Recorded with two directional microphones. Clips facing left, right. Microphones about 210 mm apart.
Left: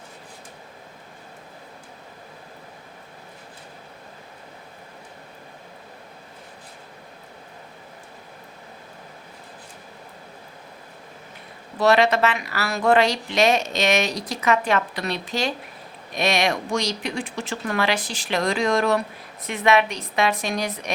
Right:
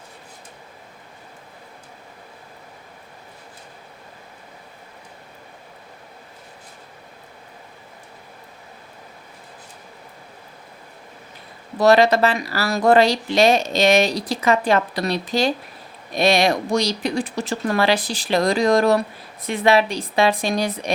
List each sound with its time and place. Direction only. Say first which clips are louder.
11.8 s speech: right 4 dB; 35° right (ahead or behind)